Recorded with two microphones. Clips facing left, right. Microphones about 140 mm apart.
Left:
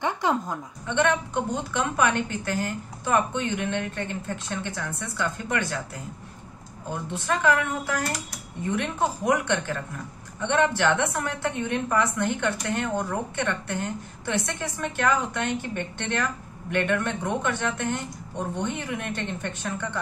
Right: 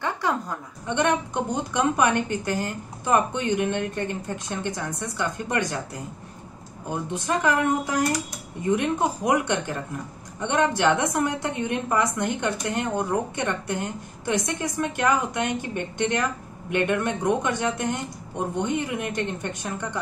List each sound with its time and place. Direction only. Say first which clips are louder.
0.0 s a sound: left 1 dB; 20° left (ahead or behind)
0.8 s a woman's voice: right 1 dB; 15° right (ahead or behind)
6.9 s a woman's voice: right 2 dB; 20° right (ahead or behind)